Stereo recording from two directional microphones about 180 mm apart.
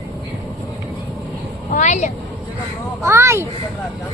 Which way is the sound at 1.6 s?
40° left (ahead or behind).